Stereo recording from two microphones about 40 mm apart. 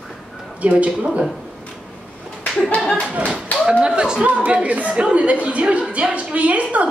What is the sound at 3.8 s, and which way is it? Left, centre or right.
A woman's voice, right.